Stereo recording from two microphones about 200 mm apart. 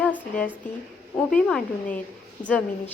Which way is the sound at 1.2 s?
5° left (ahead or behind).